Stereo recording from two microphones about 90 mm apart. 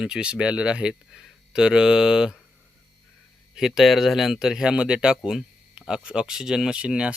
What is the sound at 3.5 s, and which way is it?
Speech, 5° right (ahead or behind).